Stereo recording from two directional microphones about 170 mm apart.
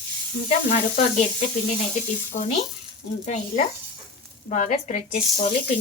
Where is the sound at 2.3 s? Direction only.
40° left (ahead or behind).